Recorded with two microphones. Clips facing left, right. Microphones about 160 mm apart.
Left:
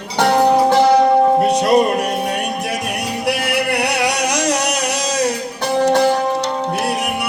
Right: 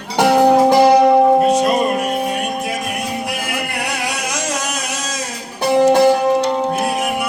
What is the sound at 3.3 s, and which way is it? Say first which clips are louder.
Music: left 5 dB; 70° left (ahead or behind).